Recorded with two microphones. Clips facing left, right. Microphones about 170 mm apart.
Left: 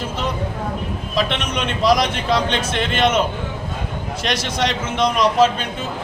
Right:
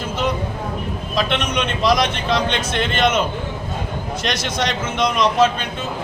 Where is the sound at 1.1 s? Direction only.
5° left (ahead or behind).